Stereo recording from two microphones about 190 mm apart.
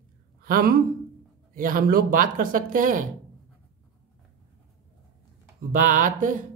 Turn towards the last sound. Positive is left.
turn(degrees=-45)  # may be behind; listen again after turning